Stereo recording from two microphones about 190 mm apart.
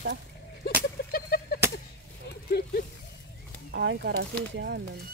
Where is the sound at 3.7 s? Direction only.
60° right (ahead or behind).